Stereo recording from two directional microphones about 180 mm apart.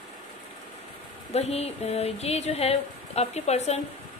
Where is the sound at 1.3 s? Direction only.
35° left (ahead or behind).